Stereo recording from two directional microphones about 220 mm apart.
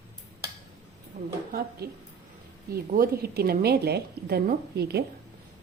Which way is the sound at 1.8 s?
45° right (ahead or behind).